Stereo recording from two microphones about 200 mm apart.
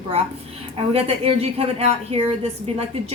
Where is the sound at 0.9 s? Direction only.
30° right (ahead or behind).